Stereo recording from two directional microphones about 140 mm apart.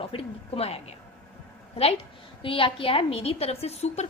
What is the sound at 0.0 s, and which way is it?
Speech, 45° left (ahead or behind).